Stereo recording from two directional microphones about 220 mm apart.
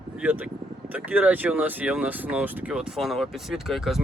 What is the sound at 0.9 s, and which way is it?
Speech, 5° right (ahead or behind).